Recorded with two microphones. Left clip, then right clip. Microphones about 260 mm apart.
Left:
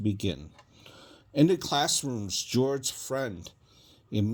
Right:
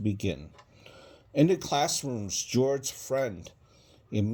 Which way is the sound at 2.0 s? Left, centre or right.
Left.